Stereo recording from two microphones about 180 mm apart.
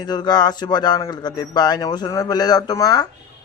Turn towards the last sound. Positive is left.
turn(degrees=20)  # may be behind; listen again after turning